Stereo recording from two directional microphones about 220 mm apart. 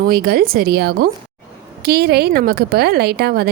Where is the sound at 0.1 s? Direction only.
45° right (ahead or behind).